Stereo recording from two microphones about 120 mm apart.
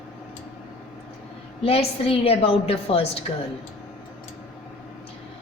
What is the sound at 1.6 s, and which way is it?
A woman's voice, 55° left (ahead or behind).